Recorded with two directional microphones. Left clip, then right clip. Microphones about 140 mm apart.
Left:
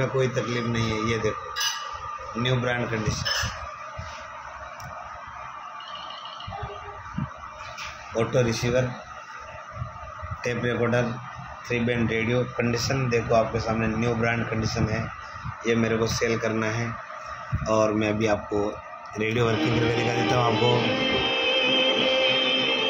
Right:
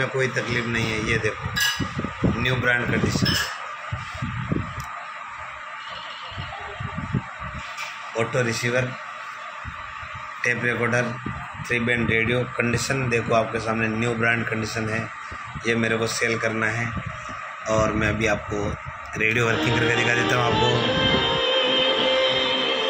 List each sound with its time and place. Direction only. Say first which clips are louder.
0.0 s a man's voice: right 1 dB; 5° left (ahead or behind)
2.4 s a man's voice: right 4 dB; 15° left (ahead or behind)
8.2 s a man's voice: even; 10° left (ahead or behind)
10.4 s a man's voice: right 3 dB; 15° left (ahead or behind)
15.6 s a man's voice: right 1 dB; 10° left (ahead or behind)
20.7 s music: right 3 dB; 90° left
21.7 s music: right 2 dB; 20° left (ahead or behind)